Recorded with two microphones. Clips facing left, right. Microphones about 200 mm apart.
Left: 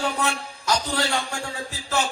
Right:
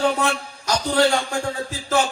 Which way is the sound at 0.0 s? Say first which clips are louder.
Right 5 dB; 45° right (ahead or behind).